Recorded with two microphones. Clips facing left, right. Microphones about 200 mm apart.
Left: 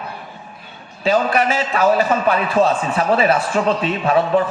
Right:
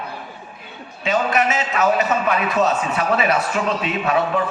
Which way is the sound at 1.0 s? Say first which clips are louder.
Left 3 dB; 35° left (ahead or behind).